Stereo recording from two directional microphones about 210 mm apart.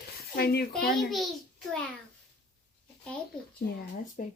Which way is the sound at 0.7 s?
Centre (ahead or behind).